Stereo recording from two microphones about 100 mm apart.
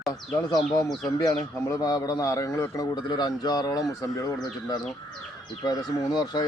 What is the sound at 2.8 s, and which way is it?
Speech, 45° left (ahead or behind).